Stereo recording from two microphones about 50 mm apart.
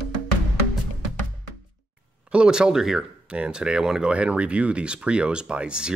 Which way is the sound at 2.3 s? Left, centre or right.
Centre.